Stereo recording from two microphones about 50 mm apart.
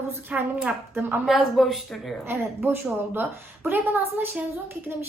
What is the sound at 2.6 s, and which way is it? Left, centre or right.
A woman's voice, right.